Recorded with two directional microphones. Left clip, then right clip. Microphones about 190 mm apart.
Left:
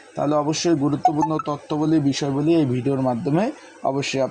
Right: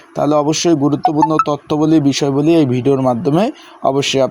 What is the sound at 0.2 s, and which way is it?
Speech, 25° right (ahead or behind).